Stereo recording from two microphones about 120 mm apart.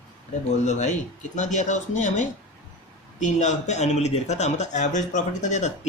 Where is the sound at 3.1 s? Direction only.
80° left.